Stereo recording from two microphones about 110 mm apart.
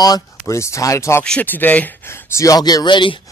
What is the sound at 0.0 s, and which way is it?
Speech, 35° left (ahead or behind).